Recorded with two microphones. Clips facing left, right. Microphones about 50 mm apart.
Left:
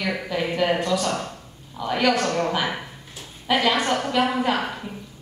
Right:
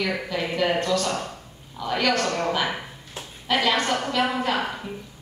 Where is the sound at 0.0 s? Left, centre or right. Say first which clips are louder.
Left 1 dB; centre.